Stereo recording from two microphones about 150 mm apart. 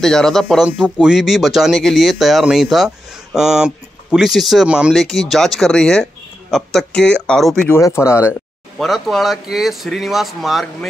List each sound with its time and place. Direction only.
0.0 s speech: centre (ahead or behind)
7.7 s speech: 20° left (ahead or behind)
8.7 s speech: centre (ahead or behind)